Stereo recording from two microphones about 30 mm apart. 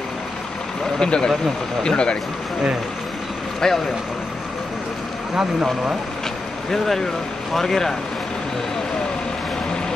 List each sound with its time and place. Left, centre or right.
0.9 s speech: left
3.6 s speech: centre
5.3 s speech: right
6.7 s speech: centre